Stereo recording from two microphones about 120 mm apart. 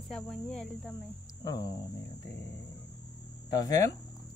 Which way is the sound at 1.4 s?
35° left (ahead or behind).